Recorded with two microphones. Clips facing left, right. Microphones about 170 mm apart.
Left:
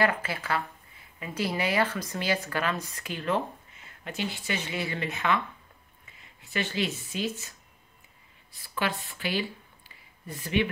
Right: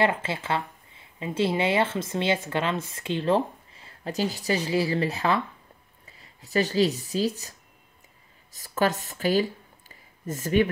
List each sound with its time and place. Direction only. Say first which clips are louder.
0.0 s speech: right 2 dB; 25° right (ahead or behind); by 10.7 s 45° right (ahead or behind)